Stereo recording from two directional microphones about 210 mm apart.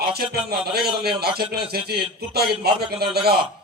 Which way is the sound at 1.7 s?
50° right (ahead or behind).